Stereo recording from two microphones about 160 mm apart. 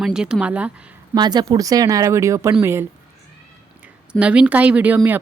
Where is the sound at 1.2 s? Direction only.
25° right (ahead or behind).